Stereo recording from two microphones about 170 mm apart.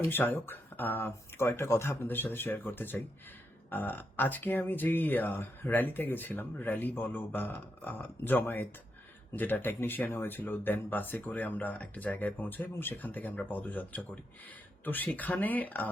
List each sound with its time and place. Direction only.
0.1 s speech: 10° left (ahead or behind)